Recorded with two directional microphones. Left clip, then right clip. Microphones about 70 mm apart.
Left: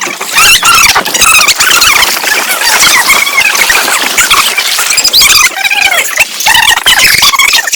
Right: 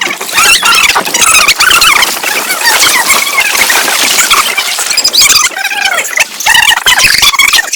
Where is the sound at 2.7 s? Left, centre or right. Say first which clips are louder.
Left 4 dB; left.